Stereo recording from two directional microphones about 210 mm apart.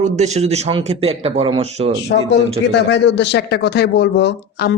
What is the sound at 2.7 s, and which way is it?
Speech, 55° left (ahead or behind).